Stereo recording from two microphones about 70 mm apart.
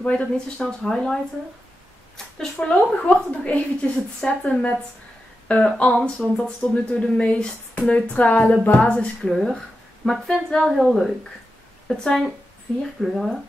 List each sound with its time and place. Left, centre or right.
0.0 s speech: centre
9.3 s a woman's voice: centre